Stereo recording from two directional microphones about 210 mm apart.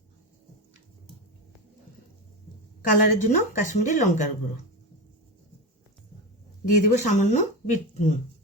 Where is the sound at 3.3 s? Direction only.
35° left (ahead or behind).